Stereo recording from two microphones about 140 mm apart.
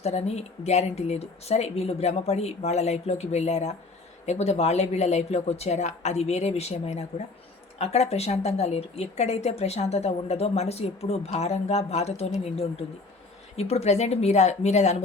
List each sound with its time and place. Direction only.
0.0 s a woman's voice: 50° left (ahead or behind)